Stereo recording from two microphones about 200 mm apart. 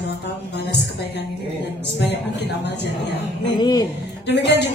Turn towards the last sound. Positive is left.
turn(degrees=60)  # may be behind; listen again after turning